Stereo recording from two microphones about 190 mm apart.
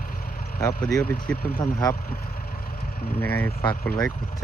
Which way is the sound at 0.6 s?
15° left (ahead or behind).